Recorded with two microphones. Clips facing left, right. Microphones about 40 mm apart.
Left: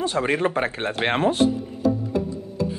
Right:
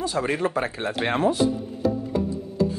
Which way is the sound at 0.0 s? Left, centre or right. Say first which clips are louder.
Left 2 dB; left.